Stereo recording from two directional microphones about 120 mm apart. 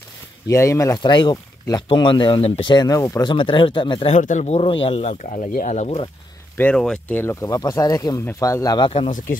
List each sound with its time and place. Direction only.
0.5 s speech: 25° left (ahead or behind)
1.0 s speech: 40° left (ahead or behind)
3.0 s speech: 25° left (ahead or behind)
3.3 s speech: 45° left (ahead or behind)
4.1 s speech: 85° left
4.6 s speech: 50° left (ahead or behind); by 6.0 s 65° left (ahead or behind)
6.5 s speech: 15° left (ahead or behind)
7.2 s speech: 25° left (ahead or behind)